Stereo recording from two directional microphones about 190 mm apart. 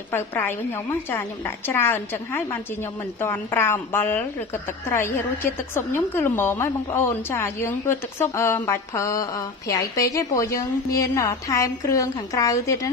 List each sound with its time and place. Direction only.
0.1 s a woman's voice: 10° left (ahead or behind)